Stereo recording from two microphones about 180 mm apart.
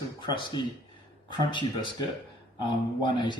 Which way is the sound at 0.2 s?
25° left (ahead or behind).